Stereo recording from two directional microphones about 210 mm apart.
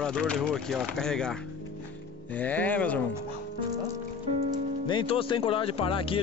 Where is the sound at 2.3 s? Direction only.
10° left (ahead or behind).